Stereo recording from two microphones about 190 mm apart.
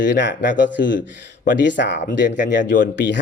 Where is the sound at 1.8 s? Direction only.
65° left (ahead or behind).